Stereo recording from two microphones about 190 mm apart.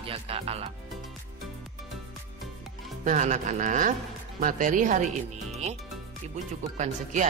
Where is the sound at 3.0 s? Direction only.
40° right (ahead or behind).